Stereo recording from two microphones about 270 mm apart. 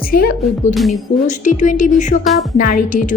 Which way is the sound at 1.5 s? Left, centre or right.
Left.